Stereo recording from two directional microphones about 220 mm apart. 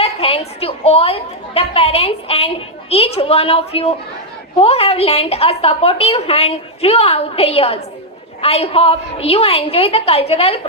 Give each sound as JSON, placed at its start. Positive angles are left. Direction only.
{"t": 0.0, "sound": "a woman's voice", "side_deg": 25}